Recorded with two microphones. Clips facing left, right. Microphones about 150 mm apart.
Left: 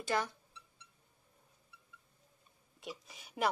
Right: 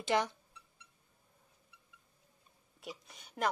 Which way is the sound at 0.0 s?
20° right (ahead or behind).